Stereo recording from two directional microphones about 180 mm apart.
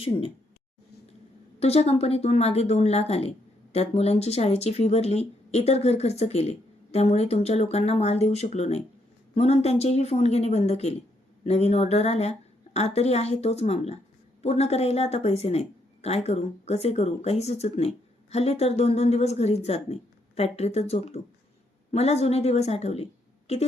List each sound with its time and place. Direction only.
0.0 s speech: 30° left (ahead or behind)
1.5 s speech: 35° left (ahead or behind)